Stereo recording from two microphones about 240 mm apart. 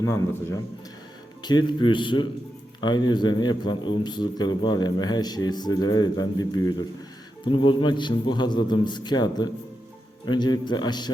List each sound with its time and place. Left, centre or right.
0.0 s a man's voice: centre